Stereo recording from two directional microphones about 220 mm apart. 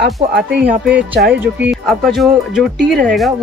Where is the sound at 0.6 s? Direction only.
5° right (ahead or behind).